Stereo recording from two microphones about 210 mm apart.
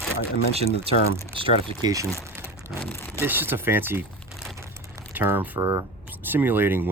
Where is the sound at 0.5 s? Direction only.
30° right (ahead or behind).